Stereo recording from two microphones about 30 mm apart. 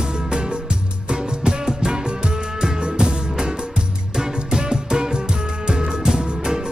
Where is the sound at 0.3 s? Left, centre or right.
Right.